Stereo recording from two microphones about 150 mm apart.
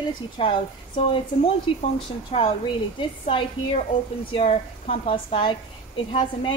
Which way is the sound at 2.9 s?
35° left (ahead or behind).